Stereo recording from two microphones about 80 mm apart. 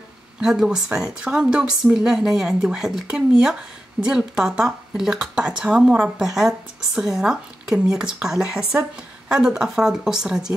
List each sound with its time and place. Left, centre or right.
0.4 s speech: centre